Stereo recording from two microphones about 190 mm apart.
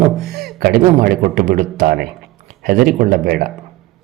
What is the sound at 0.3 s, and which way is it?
A man's voice, 55° right (ahead or behind).